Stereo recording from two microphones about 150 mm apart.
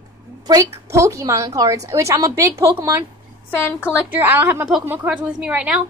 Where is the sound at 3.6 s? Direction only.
15° left (ahead or behind).